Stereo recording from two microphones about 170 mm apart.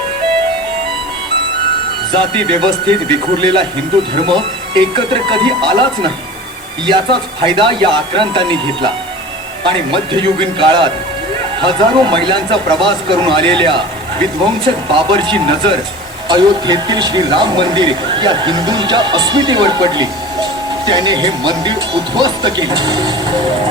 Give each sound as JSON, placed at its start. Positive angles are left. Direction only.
{"t": 2.1, "sound": "speech", "side_deg": -30}